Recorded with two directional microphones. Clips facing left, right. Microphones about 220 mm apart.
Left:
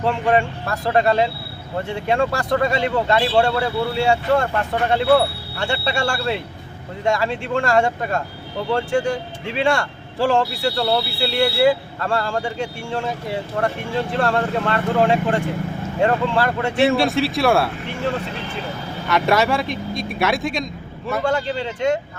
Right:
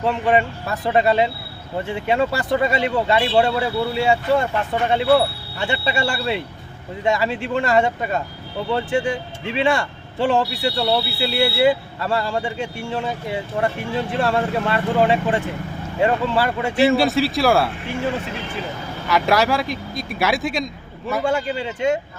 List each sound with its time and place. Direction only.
0.0 s speech: 5° right (ahead or behind)
5.5 s speech: 5° right (ahead or behind)
14.2 s speech: 5° right (ahead or behind)
19.0 s a man's voice: centre (ahead or behind)